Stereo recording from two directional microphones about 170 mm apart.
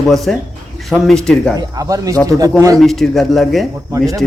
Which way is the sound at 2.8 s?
Centre (ahead or behind).